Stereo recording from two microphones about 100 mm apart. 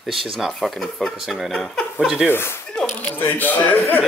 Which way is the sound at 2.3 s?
25° left (ahead or behind).